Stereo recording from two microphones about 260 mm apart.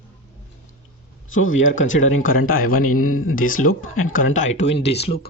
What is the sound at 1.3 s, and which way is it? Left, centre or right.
Speech, left.